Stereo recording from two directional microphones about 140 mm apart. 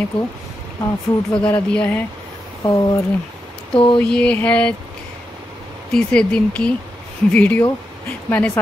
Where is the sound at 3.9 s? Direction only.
5° left (ahead or behind).